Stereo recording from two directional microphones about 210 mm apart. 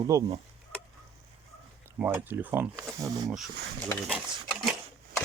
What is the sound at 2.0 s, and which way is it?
Speech, 10° right (ahead or behind).